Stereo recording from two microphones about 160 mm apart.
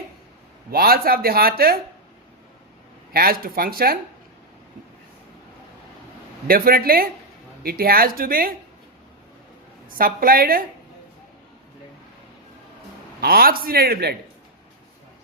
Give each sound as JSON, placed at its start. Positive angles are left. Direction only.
{"t": 0.7, "sound": "speech", "side_deg": -70}
{"t": 3.1, "sound": "speech", "side_deg": -70}
{"t": 6.5, "sound": "speech", "side_deg": -65}
{"t": 10.0, "sound": "speech", "side_deg": -65}
{"t": 13.2, "sound": "speech", "side_deg": -70}